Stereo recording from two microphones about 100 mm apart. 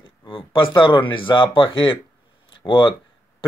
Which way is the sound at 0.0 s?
60° left (ahead or behind).